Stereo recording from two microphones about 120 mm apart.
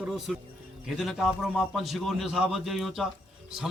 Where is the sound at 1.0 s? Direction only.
Centre (ahead or behind).